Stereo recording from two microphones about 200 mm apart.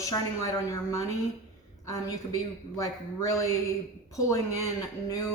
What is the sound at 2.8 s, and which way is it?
Speech, 15° left (ahead or behind).